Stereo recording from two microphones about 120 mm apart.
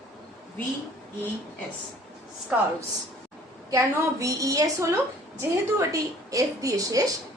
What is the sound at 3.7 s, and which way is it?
A woman's voice, 25° right (ahead or behind).